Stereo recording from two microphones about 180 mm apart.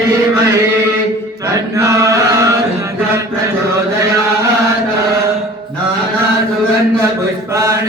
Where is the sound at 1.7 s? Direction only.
15° right (ahead or behind).